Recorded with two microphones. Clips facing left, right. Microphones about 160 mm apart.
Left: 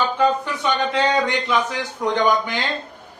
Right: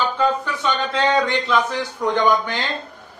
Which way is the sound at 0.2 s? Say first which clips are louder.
Left 2 dB; 15° left (ahead or behind).